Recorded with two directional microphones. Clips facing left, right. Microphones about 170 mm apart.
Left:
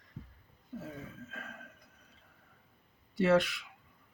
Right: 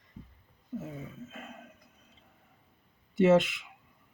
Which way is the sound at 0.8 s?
20° right (ahead or behind).